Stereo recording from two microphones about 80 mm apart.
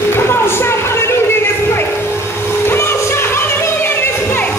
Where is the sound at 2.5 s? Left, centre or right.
Left.